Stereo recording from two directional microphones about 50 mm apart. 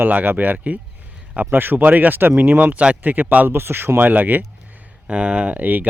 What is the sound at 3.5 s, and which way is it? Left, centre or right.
Speech, right.